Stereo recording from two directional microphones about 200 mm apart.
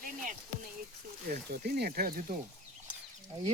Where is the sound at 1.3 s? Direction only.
50° right (ahead or behind).